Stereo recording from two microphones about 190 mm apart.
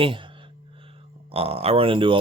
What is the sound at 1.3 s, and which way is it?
Speech, 30° right (ahead or behind).